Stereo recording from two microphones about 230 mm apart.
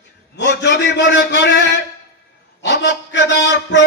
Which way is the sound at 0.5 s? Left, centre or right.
Left.